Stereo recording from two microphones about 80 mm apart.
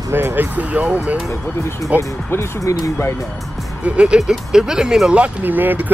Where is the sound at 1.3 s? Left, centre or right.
Left.